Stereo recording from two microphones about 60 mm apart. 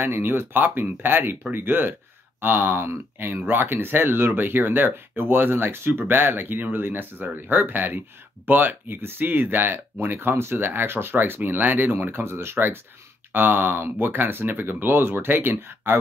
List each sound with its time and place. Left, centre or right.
0.0 s speech: right